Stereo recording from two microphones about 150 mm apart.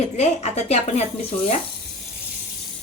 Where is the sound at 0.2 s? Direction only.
45° left (ahead or behind).